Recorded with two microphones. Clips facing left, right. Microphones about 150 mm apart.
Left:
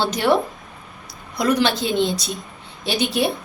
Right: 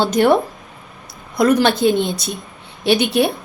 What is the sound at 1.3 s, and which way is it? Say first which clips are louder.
A woman's voice: right 5 dB; 50° right (ahead or behind).